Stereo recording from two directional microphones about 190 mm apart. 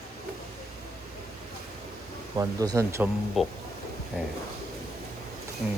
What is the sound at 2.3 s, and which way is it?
Speech, 20° right (ahead or behind).